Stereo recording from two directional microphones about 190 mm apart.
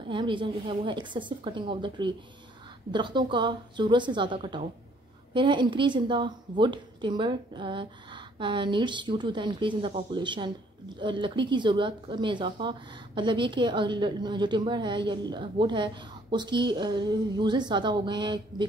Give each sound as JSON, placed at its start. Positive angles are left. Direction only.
{"t": 0.1, "sound": "speech", "side_deg": -25}